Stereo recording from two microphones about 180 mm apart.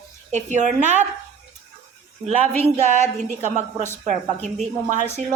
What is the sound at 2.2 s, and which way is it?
A woman's voice, 35° right (ahead or behind).